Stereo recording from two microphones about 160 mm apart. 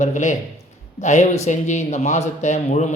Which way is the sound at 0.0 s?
50° left (ahead or behind).